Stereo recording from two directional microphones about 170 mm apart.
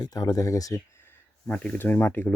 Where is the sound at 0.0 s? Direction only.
25° left (ahead or behind).